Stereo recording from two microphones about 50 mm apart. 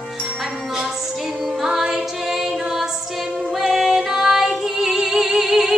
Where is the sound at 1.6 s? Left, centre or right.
Centre.